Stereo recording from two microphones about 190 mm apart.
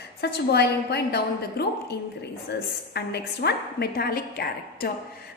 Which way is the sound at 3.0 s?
60° left (ahead or behind).